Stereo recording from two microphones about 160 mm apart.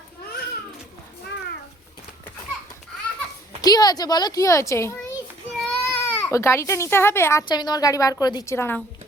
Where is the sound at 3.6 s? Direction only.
25° left (ahead or behind).